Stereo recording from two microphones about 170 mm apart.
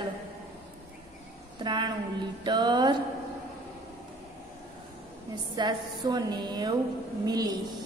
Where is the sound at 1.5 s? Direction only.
25° right (ahead or behind).